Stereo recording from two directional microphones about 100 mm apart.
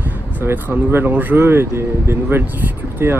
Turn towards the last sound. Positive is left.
turn(degrees=-25)  # may be behind; listen again after turning